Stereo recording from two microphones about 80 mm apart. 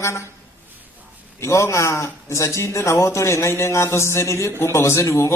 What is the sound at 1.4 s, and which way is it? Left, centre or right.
A man's voice, left.